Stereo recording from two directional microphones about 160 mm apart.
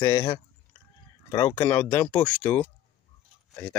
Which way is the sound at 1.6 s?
10° left (ahead or behind).